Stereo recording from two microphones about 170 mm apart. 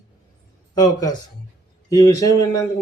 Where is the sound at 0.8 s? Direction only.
25° left (ahead or behind).